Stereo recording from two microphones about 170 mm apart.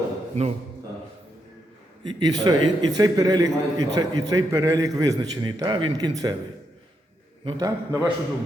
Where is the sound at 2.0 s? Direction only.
25° right (ahead or behind).